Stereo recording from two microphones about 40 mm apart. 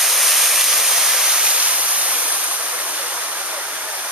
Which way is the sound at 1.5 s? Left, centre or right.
Right.